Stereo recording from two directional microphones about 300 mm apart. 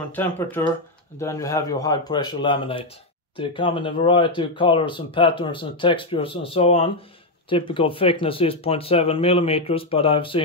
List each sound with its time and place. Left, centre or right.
0.1 s speech: centre